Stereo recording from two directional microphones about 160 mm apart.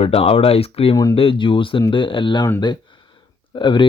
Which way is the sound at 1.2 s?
35° left (ahead or behind).